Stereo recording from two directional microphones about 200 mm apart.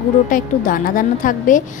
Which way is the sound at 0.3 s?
45° left (ahead or behind).